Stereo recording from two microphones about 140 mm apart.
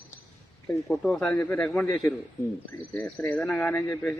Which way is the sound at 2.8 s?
10° left (ahead or behind).